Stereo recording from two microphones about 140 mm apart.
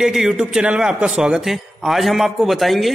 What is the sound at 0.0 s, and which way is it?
A man's voice, centre (ahead or behind).